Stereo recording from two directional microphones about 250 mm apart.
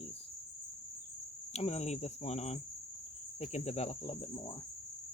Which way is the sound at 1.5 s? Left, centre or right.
Left.